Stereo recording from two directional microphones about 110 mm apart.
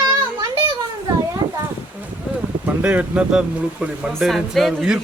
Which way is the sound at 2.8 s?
10° right (ahead or behind).